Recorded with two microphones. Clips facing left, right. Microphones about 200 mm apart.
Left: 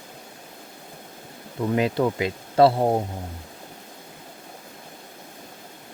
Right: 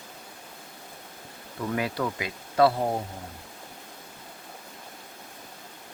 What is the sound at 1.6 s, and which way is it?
Speech, 25° left (ahead or behind).